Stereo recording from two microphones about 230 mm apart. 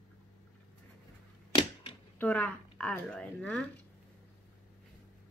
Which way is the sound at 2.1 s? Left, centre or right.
Centre.